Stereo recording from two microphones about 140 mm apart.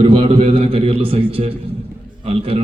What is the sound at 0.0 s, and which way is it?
A man's voice, 40° right (ahead or behind).